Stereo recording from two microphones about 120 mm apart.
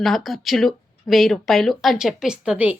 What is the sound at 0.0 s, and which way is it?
A woman's voice, centre (ahead or behind).